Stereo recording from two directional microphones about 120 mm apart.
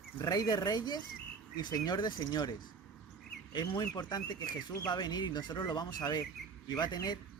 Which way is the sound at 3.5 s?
35° left (ahead or behind).